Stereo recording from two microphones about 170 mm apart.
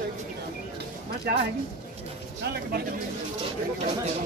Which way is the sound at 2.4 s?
70° right (ahead or behind).